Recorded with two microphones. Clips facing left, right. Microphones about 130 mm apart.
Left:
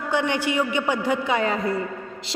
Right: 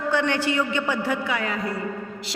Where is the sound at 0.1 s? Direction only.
15° left (ahead or behind).